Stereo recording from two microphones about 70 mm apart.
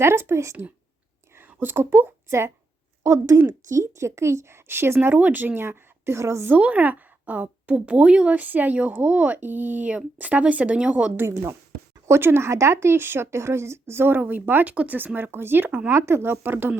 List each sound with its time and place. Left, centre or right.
0.0 s speech: right
1.4 s a woman's voice: right
6.5 s a woman's voice: right
12.0 s speech: right
15.9 s speech: right